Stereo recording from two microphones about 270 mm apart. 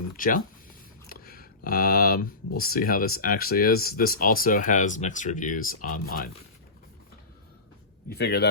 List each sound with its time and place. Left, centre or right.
0.2 s speech: left
1.0 s a sound: left
2.6 s speech: left
8.1 s speech: left